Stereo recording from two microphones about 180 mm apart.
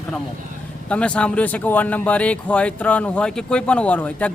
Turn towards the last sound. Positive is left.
turn(degrees=10)  # may be behind; listen again after turning